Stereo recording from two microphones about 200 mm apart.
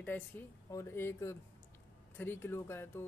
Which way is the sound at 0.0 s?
10° left (ahead or behind).